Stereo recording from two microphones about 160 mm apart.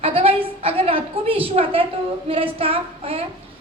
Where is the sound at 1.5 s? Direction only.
35° right (ahead or behind).